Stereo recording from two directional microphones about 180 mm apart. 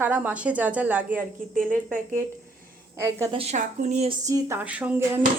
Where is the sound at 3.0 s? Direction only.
15° right (ahead or behind).